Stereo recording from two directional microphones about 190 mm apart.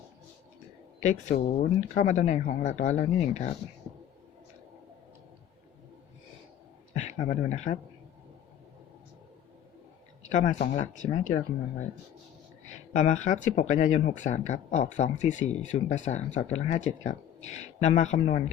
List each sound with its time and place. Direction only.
0.9 s speech: 40° left (ahead or behind)
6.9 s speech: 35° left (ahead or behind)
10.2 s speech: 40° left (ahead or behind)
12.6 s speech: 40° left (ahead or behind)